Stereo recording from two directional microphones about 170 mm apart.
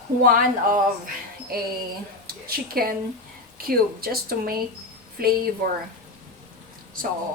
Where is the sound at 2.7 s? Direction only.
60° right (ahead or behind).